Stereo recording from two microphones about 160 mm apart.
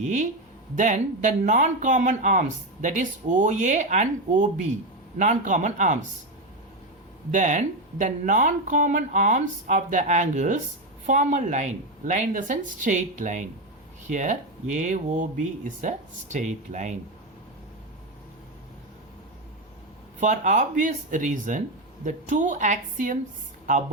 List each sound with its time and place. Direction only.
0.0 s speech: 50° right (ahead or behind)
7.3 s speech: 50° right (ahead or behind)
20.1 s speech: 50° right (ahead or behind)